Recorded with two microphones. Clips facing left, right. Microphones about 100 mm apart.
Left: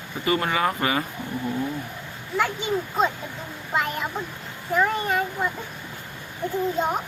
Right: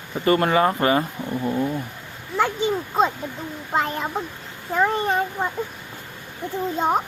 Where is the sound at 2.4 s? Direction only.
35° right (ahead or behind).